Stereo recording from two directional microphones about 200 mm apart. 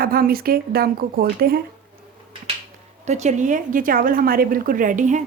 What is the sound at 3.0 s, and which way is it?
A woman's voice, 35° right (ahead or behind).